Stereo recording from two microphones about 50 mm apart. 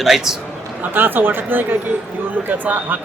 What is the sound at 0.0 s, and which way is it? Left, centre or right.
Speech, centre.